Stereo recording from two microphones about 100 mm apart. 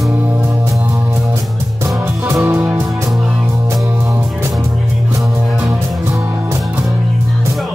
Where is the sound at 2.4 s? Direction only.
15° right (ahead or behind).